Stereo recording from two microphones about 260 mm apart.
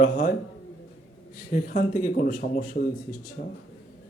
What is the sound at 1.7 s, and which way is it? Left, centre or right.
A man's voice, left.